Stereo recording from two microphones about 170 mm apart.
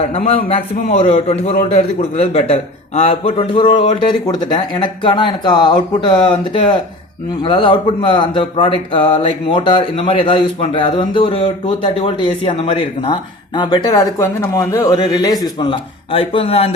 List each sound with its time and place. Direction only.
0.3 s a man's voice: 35° left (ahead or behind)